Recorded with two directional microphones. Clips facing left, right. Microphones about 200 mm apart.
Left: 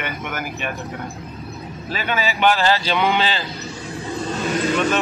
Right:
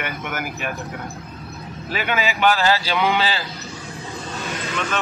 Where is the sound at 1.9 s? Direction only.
15° right (ahead or behind).